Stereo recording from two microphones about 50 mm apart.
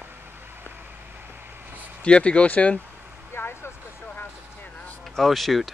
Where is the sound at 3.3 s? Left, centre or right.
Left.